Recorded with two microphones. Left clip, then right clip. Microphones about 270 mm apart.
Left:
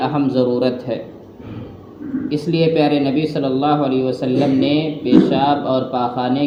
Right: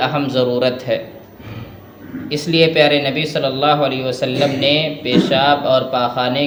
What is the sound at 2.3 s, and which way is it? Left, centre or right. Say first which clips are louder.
A man's voice: right 3 dB; right.